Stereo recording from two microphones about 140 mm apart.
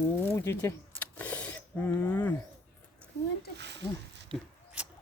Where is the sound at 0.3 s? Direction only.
20° left (ahead or behind).